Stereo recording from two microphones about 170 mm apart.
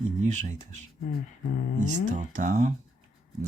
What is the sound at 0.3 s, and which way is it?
Speech, 45° right (ahead or behind).